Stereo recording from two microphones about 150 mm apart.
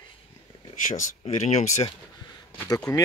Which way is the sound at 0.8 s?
55° left (ahead or behind).